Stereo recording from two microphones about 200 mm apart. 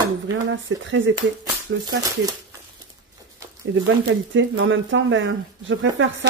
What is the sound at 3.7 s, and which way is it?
Speech, 70° right (ahead or behind).